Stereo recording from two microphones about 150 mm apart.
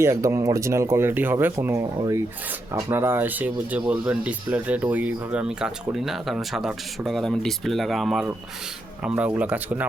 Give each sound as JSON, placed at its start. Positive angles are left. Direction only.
{"t": 0.0, "sound": "speech", "side_deg": -20}